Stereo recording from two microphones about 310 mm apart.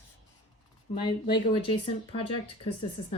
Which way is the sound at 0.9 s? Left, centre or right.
Centre.